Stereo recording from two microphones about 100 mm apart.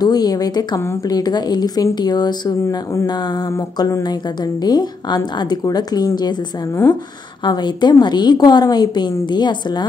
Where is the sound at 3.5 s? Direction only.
35° left (ahead or behind).